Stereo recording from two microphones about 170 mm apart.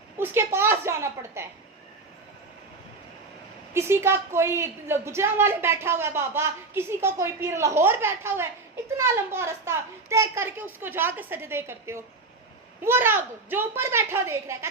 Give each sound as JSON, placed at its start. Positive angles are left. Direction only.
{"t": 0.2, "sound": "a woman's voice", "side_deg": -15}
{"t": 3.8, "sound": "a woman's voice", "side_deg": -15}